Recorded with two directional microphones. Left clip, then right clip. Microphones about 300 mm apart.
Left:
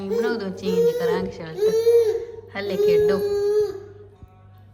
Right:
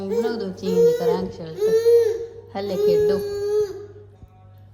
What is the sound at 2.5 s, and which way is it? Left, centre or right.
Speech, centre.